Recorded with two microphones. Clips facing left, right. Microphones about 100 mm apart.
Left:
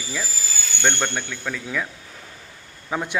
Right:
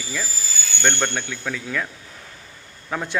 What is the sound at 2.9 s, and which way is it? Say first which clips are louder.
Speech: left 1 dB; 10° left (ahead or behind).